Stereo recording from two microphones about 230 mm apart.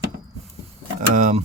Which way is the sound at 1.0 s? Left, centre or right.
Right.